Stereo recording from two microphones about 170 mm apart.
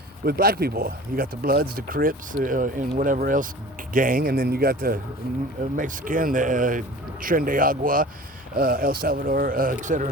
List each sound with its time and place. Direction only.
0.3 s speech: 60° right (ahead or behind)
5.2 s speech: 60° left (ahead or behind)
5.7 s speech: 50° right (ahead or behind)